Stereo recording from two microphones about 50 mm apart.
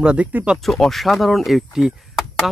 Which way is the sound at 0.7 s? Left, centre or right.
Centre.